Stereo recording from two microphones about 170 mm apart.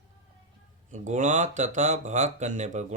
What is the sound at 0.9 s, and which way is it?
Speech, 45° right (ahead or behind).